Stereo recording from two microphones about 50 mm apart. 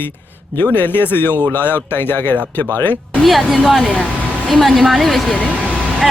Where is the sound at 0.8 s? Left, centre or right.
Left.